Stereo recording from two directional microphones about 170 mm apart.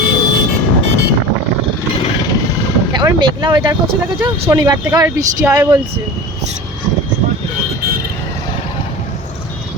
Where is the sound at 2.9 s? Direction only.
25° right (ahead or behind).